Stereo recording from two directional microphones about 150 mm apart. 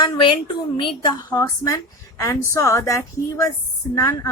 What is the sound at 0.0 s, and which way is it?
A woman's voice, 30° left (ahead or behind).